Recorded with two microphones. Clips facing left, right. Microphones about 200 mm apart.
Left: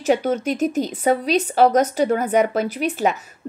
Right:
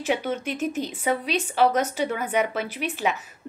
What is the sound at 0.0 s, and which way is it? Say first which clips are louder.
Speech: left 7 dB; 40° left (ahead or behind).